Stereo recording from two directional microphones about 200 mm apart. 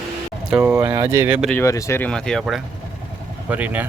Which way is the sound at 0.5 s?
10° right (ahead or behind).